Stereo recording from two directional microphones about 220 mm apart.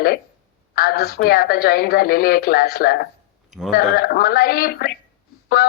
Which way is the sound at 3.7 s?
45° left (ahead or behind).